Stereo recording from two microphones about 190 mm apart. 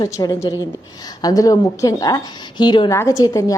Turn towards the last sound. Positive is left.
turn(degrees=20)  # may be behind; listen again after turning